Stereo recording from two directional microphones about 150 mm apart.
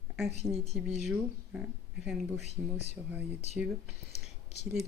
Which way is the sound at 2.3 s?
50° left (ahead or behind).